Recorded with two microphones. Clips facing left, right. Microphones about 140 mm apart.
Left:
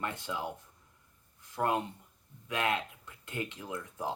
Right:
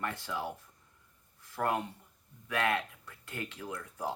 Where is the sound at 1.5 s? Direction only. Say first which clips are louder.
Left 1 dB; 20° left (ahead or behind).